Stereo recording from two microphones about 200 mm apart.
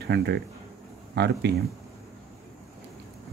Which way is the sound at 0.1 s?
55° right (ahead or behind).